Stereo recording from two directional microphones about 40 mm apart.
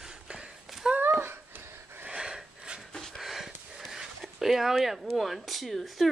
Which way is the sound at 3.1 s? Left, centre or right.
Centre.